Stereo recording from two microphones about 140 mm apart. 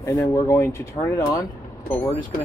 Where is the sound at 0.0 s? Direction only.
20° left (ahead or behind).